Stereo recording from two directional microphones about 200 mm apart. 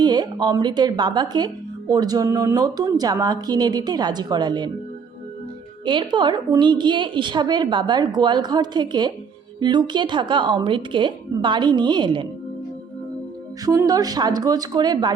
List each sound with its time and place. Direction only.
0.0 s a woman's voice: 20° right (ahead or behind)
5.8 s a woman's voice: 25° right (ahead or behind)
13.7 s a woman's voice: 15° right (ahead or behind)